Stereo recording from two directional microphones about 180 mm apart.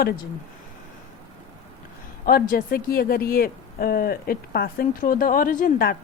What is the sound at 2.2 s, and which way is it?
A woman's voice, 50° left (ahead or behind).